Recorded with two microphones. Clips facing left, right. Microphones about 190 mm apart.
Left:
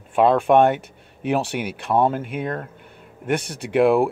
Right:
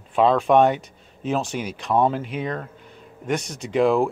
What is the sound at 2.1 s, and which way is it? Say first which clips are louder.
Speech: left 1 dB; 55° left (ahead or behind).